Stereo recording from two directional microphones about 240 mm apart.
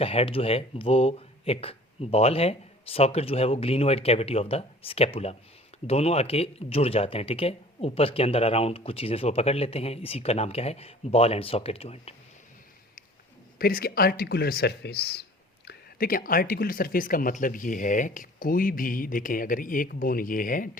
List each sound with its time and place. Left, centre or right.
0.0 s speech: left
13.6 s speech: left